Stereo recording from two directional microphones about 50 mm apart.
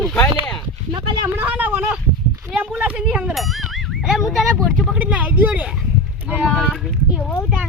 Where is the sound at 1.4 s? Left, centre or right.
Right.